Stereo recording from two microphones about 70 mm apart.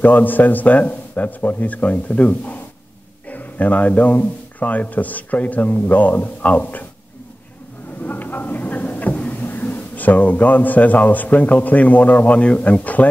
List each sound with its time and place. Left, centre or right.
0.0 s a man's voice: left
8.0 s a sound: left
9.4 s a man's voice: left